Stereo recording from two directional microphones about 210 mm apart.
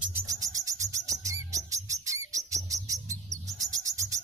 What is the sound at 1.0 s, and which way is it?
Bird, 15° right (ahead or behind).